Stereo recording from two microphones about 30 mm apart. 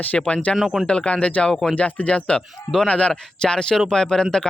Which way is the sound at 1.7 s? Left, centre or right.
Left.